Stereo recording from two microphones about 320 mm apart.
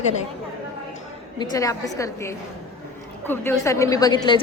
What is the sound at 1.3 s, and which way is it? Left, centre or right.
A woman's voice, centre.